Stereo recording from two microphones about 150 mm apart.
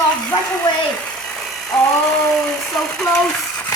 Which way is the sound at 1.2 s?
Centre (ahead or behind).